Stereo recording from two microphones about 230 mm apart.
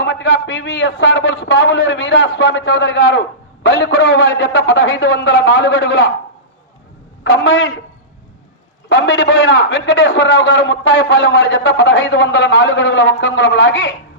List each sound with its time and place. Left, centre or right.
0.0 s a man's voice: left
7.3 s a man's voice: left
8.9 s a man's voice: left